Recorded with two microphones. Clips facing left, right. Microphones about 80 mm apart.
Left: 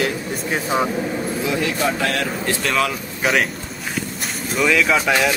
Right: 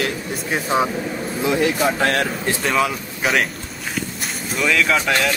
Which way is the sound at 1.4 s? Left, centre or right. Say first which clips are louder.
Right 4 dB; right.